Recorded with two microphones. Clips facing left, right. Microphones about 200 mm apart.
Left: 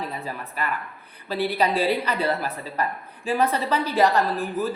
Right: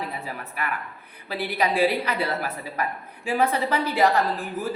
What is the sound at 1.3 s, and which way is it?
A woman's voice, 10° right (ahead or behind).